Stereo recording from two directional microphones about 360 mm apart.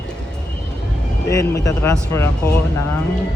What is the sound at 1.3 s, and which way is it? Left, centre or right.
Speech, centre.